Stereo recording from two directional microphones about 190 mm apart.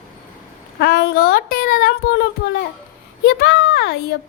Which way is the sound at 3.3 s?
60° left (ahead or behind).